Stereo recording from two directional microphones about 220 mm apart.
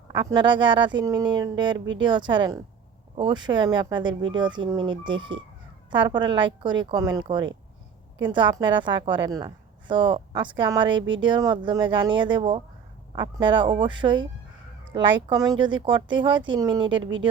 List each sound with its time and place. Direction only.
0.3 s a woman's voice: 20° right (ahead or behind)
16.9 s speech: 60° right (ahead or behind)